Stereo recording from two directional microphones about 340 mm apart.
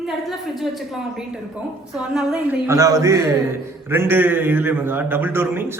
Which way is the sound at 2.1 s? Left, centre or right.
Centre.